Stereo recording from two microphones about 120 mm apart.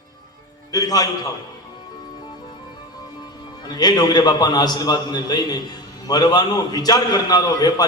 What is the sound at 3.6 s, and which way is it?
A man's voice, 35° left (ahead or behind).